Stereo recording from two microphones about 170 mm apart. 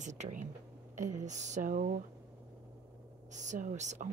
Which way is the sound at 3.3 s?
50° right (ahead or behind).